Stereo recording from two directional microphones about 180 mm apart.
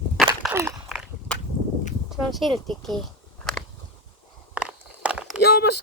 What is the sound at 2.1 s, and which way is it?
Speech, centre (ahead or behind).